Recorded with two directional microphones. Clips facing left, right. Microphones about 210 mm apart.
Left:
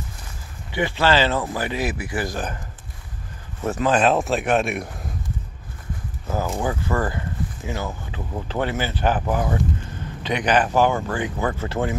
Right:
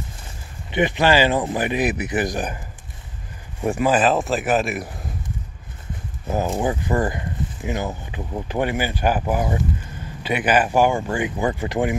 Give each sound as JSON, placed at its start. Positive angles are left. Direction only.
{"t": 0.7, "sound": "speech", "side_deg": -20}
{"t": 3.6, "sound": "a man's voice", "side_deg": -10}
{"t": 6.2, "sound": "speech", "side_deg": -20}